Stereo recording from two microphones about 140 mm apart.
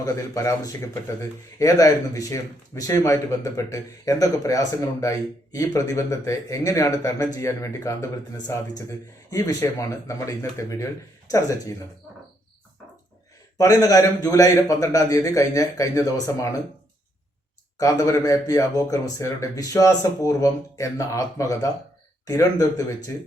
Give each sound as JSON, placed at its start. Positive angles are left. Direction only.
{"t": 0.0, "sound": "a man's voice", "side_deg": 25}
{"t": 13.6, "sound": "a man's voice", "side_deg": 25}
{"t": 17.7, "sound": "a man's voice", "side_deg": 25}